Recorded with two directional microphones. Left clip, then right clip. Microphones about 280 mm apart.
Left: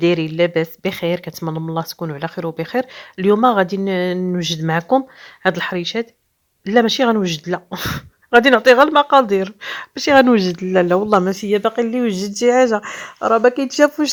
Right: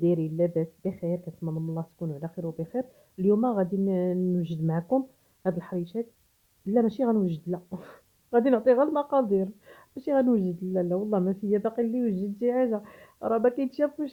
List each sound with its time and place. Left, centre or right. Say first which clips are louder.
0.0 s speech: left 10 dB; centre